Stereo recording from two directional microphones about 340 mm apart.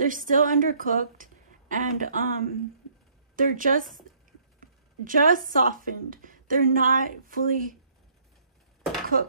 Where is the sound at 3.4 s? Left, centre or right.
Right.